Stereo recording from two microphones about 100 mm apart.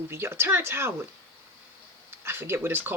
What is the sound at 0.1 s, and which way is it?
Speech, 25° right (ahead or behind).